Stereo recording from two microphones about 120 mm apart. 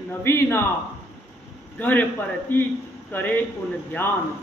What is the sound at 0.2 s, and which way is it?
Speech, 20° left (ahead or behind).